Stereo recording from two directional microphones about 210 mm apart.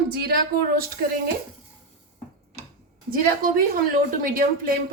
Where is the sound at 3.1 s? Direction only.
40° right (ahead or behind).